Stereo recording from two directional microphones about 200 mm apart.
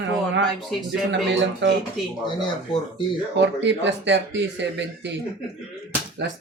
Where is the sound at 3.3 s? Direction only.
60° right (ahead or behind).